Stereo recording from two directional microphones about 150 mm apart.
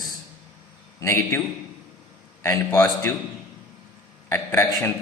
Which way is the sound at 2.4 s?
20° left (ahead or behind).